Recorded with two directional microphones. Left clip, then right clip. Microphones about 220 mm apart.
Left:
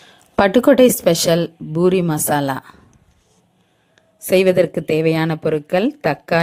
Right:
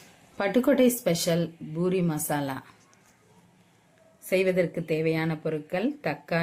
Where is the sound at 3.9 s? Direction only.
45° left (ahead or behind).